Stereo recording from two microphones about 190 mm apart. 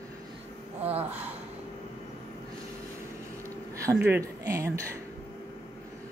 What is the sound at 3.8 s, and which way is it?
Speech, 15° right (ahead or behind).